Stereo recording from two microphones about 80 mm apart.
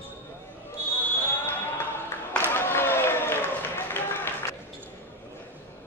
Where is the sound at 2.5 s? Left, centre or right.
Left.